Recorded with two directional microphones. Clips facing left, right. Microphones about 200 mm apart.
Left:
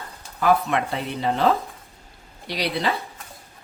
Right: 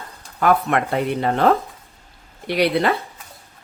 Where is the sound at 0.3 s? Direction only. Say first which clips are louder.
Right 2 dB; 55° right (ahead or behind).